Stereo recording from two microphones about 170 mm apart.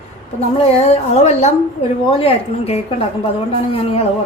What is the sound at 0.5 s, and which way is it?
A woman's voice, 40° left (ahead or behind).